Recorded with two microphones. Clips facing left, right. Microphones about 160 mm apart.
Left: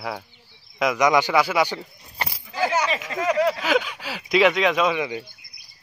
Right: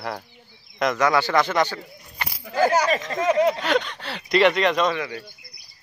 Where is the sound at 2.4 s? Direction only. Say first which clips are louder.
Right 5 dB; 55° right (ahead or behind).